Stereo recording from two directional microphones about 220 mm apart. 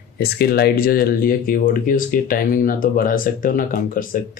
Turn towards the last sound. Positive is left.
turn(degrees=40)  # may be behind; listen again after turning